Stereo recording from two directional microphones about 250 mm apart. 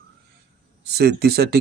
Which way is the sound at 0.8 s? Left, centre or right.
Right.